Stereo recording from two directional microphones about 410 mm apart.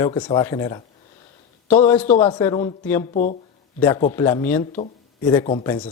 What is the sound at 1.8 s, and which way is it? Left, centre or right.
A man's voice, centre.